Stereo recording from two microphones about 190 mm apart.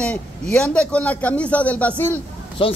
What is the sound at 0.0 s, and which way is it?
A man's voice, 5° left (ahead or behind).